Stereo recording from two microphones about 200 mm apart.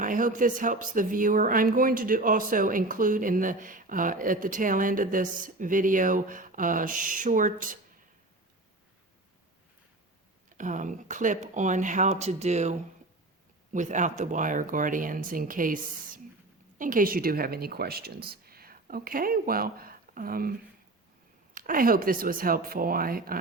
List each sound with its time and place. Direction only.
0.0 s speech: 40° right (ahead or behind)
10.5 s speech: 40° right (ahead or behind)
13.7 s speech: 40° right (ahead or behind)